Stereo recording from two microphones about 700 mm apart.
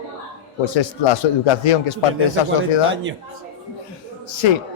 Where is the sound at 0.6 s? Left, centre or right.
Left.